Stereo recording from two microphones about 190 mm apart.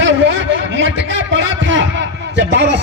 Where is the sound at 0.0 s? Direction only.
75° right (ahead or behind).